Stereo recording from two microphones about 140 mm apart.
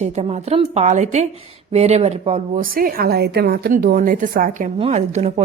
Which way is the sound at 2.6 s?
90° right.